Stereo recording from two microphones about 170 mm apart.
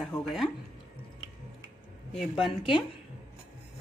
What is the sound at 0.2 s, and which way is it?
Speech, centre (ahead or behind).